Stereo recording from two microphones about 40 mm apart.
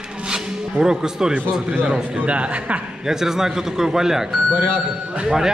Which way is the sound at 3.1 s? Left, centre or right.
Centre.